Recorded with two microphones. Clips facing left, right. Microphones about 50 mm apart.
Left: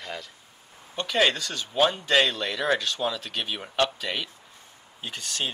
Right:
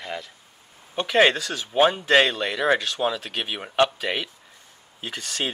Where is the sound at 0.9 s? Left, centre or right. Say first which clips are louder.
Right 5 dB; right.